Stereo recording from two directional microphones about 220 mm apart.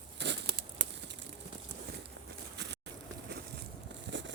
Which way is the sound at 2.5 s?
50° right (ahead or behind).